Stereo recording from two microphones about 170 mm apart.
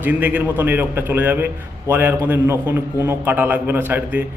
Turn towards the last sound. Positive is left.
turn(degrees=-10)  # may be behind; listen again after turning